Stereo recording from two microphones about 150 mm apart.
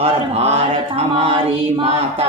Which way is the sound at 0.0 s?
45° right (ahead or behind).